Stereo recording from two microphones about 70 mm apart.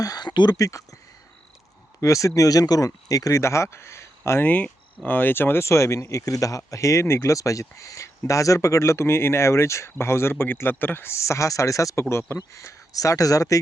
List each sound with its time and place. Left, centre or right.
0.0 s a sound: left
0.5 s speech: left
2.0 s speech: left
4.2 s speech: left